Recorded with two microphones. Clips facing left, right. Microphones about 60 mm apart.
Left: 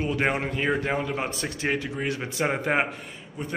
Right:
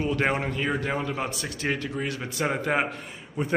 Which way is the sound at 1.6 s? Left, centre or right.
Centre.